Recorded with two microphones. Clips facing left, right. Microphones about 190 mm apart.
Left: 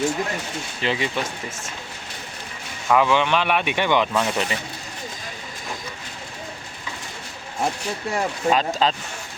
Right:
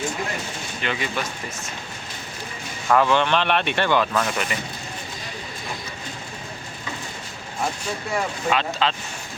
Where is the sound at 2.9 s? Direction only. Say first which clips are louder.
Even; 10° left (ahead or behind).